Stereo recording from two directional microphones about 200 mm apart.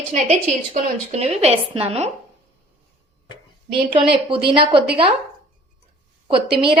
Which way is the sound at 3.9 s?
25° right (ahead or behind).